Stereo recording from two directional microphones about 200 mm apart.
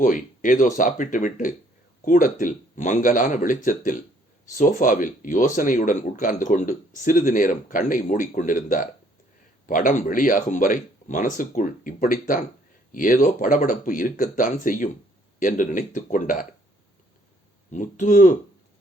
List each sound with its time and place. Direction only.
0.0 s speech: 40° left (ahead or behind)
17.7 s speech: 40° left (ahead or behind)